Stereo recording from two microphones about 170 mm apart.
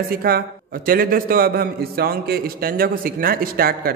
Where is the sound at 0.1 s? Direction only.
60° right (ahead or behind).